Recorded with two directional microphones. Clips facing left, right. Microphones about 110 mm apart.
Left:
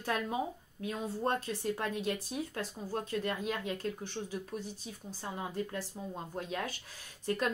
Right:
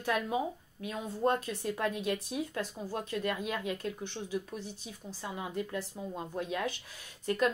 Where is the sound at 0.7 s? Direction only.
35° left (ahead or behind).